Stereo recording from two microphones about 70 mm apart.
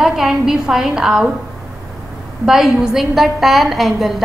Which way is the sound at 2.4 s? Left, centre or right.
Centre.